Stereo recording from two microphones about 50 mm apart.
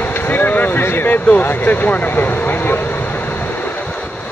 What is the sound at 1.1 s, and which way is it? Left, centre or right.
Speech, left.